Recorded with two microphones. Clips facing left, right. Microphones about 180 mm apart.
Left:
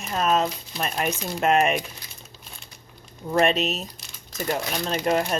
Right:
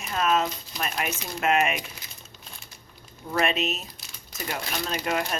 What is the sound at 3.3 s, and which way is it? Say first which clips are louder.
Speech: left 5 dB; 35° left (ahead or behind).